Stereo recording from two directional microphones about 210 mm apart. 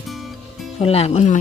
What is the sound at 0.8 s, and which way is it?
Speech, 30° left (ahead or behind).